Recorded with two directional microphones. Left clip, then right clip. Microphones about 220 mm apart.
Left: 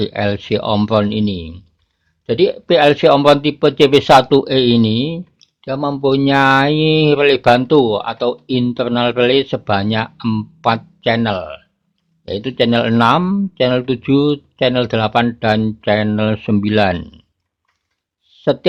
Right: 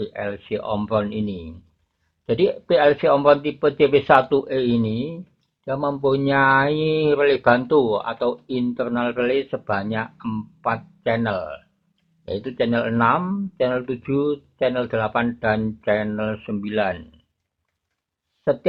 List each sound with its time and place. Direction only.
0.0 s speech: 40° left (ahead or behind)
2.2 s speech: 15° left (ahead or behind); by 5.2 s 30° left (ahead or behind)
5.5 s speech: 15° left (ahead or behind); by 17.1 s 40° left (ahead or behind)